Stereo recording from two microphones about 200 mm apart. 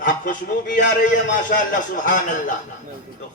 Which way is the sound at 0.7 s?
60° left (ahead or behind).